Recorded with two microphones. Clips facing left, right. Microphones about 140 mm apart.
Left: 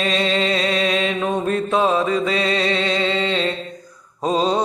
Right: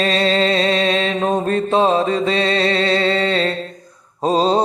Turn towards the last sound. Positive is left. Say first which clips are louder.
# right 3 dB
turn(degrees=-35)  # may be behind; listen again after turning